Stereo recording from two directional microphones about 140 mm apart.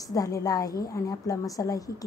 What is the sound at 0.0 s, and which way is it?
A woman's voice, 25° left (ahead or behind).